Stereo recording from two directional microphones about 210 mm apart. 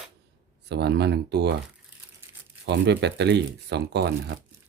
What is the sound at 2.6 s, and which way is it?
Speech, 55° right (ahead or behind).